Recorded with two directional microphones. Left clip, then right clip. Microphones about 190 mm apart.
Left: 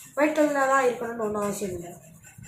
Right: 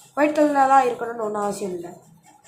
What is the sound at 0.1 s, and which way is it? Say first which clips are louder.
Speech: right 4 dB; 50° right (ahead or behind).